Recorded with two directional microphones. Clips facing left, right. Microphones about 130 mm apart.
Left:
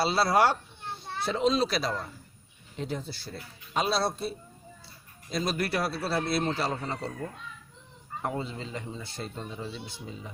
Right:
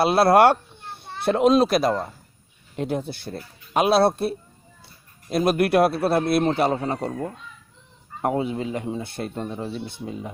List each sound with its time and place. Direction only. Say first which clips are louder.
0.0 s a child's voice: right 8 dB; 60° right (ahead or behind)